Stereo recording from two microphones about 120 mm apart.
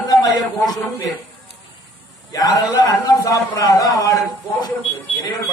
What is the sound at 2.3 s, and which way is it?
A man's voice, 30° left (ahead or behind).